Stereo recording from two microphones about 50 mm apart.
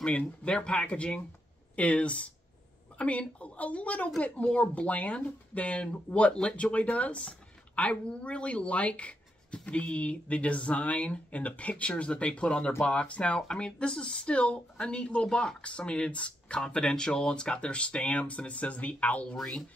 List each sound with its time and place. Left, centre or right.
0.4 s speech: centre